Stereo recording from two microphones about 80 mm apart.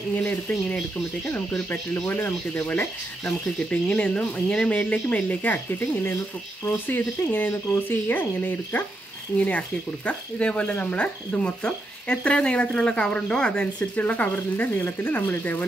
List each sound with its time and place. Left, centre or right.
0.1 s speech: centre
2.0 s speech: left
3.9 s speech: centre